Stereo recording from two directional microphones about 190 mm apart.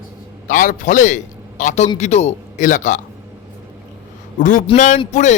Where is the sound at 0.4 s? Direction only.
40° left (ahead or behind).